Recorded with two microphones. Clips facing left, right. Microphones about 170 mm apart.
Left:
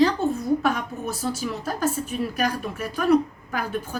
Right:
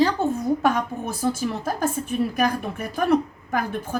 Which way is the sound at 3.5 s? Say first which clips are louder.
Right 2 dB; 55° right (ahead or behind).